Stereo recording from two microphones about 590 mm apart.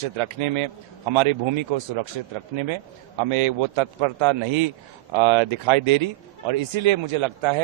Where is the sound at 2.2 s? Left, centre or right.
Right.